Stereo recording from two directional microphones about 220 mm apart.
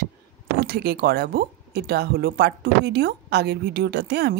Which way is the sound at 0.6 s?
45° right (ahead or behind).